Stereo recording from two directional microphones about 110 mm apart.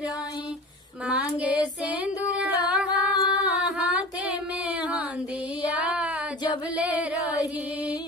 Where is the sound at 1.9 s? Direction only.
10° right (ahead or behind).